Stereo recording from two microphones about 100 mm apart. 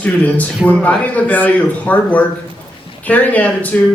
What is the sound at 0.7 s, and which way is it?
Speech, 15° left (ahead or behind).